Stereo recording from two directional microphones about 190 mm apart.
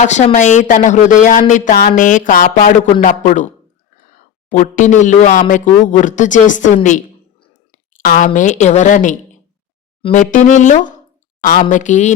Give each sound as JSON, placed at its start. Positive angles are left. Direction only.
{"t": 0.0, "sound": "speech", "side_deg": 40}
{"t": 7.7, "sound": "a woman's voice", "side_deg": 40}